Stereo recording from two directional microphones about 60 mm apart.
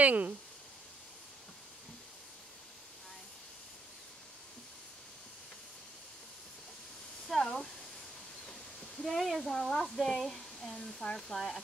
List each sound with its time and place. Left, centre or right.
0.0 s speech: right
7.2 s a sound: centre
9.0 s speech: centre